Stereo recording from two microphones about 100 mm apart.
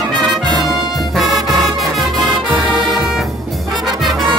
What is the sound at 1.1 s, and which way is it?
Music, centre (ahead or behind).